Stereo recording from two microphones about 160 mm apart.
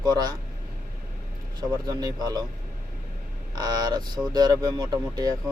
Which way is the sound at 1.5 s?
25° right (ahead or behind).